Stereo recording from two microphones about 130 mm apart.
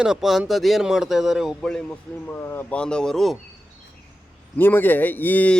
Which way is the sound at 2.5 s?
15° left (ahead or behind).